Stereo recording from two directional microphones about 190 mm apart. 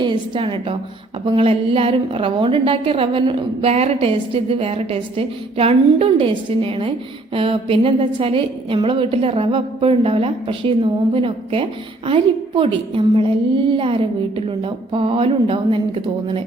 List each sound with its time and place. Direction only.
0.0 s a woman's voice: 25° right (ahead or behind)